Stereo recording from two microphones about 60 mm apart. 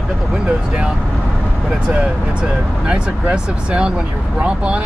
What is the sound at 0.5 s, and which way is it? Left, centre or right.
Speech, centre.